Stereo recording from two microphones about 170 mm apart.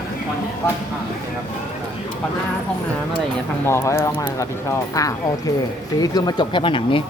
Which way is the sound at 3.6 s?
15° left (ahead or behind).